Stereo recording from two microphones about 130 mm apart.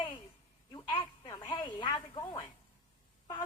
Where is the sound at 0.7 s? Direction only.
35° left (ahead or behind).